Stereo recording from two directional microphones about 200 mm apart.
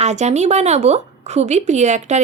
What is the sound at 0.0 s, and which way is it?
A woman's voice, 35° right (ahead or behind).